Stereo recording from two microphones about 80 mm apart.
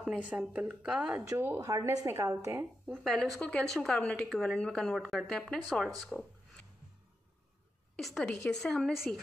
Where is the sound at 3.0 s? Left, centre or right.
Centre.